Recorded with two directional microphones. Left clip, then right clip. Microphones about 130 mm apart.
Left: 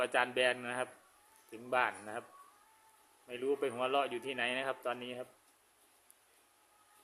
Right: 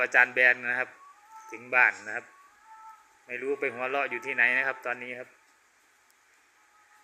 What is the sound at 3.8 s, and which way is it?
Speech, 20° right (ahead or behind).